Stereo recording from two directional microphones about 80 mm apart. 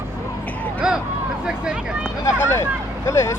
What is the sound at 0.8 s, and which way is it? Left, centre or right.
Speech, centre.